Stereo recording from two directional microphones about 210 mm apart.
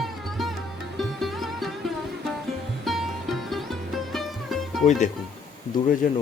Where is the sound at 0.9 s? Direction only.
Centre (ahead or behind).